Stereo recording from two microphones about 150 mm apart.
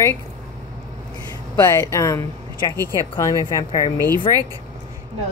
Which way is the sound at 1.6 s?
20° left (ahead or behind).